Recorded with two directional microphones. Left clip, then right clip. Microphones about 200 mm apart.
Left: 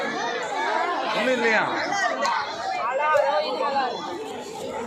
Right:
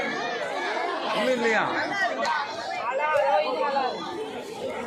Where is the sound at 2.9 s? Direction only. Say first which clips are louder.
Left 2 dB; 45° left (ahead or behind).